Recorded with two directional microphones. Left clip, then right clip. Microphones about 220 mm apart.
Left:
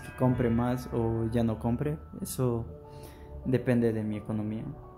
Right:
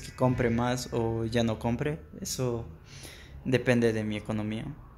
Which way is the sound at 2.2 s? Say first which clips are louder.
Even; 20° left (ahead or behind).